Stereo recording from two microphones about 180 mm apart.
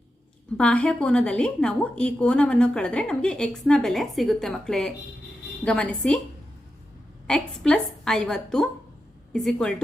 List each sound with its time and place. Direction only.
0.5 s a woman's voice: 5° left (ahead or behind)
7.3 s a woman's voice: 5° left (ahead or behind)